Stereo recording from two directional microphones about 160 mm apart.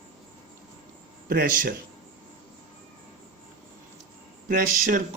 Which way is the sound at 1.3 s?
60° right (ahead or behind).